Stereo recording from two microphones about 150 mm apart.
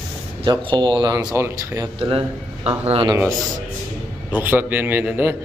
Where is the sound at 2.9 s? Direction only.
35° right (ahead or behind).